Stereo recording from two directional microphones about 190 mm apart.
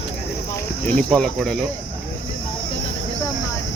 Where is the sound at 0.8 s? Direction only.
5° left (ahead or behind).